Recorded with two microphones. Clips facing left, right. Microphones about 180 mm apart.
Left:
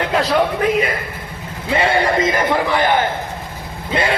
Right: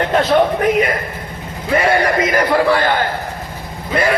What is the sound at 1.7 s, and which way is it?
A man's voice, 25° left (ahead or behind).